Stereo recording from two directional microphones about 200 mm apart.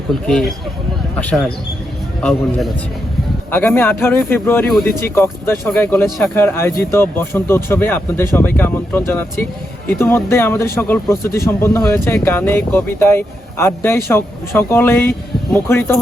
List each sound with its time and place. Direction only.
0.3 s a man's voice: centre (ahead or behind)
3.5 s speech: 10° left (ahead or behind)
11.8 s a man's voice: centre (ahead or behind)
12.0 s speech: 15° left (ahead or behind)